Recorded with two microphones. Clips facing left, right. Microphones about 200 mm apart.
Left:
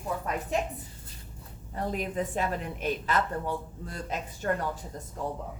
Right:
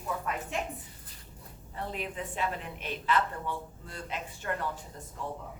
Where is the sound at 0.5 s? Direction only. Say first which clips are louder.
Left 7 dB; 40° left (ahead or behind).